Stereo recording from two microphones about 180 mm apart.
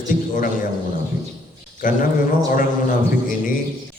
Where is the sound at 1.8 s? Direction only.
50° left (ahead or behind).